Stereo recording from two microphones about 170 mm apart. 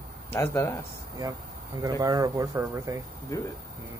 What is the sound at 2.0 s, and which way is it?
Speech, 20° right (ahead or behind).